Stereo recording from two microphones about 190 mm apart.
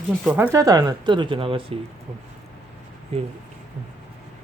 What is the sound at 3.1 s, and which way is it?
Speech, 30° right (ahead or behind).